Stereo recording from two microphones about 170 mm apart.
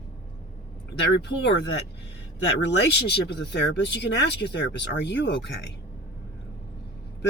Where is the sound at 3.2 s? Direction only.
90° left.